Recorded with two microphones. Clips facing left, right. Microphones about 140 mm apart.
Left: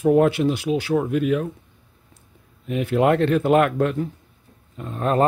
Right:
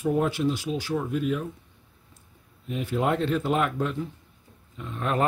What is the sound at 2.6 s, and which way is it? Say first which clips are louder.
Speech: left 7 dB; 70° left (ahead or behind).